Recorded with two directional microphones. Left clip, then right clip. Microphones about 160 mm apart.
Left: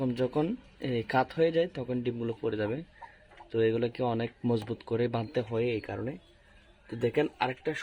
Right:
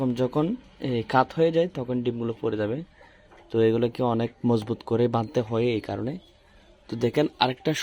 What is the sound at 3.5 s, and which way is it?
Speech, 15° right (ahead or behind).